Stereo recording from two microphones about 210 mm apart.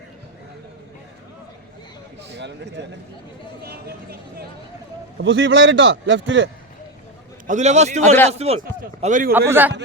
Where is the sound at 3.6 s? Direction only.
45° right (ahead or behind).